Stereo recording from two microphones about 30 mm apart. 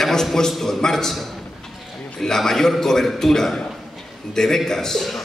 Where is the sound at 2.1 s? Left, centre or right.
Centre.